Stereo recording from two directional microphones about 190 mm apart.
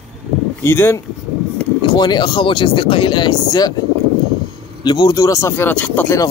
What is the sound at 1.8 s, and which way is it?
Speech, 25° left (ahead or behind).